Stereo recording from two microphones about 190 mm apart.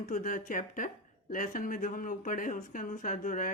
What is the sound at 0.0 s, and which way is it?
Speech, 45° left (ahead or behind).